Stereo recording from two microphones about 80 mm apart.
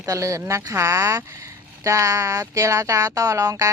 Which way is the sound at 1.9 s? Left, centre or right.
Right.